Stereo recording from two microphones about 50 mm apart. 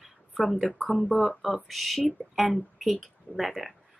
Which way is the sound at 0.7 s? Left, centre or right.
Left.